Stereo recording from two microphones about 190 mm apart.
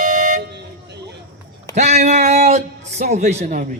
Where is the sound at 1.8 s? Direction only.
35° right (ahead or behind).